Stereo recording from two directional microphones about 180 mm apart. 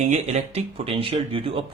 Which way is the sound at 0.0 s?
40° right (ahead or behind).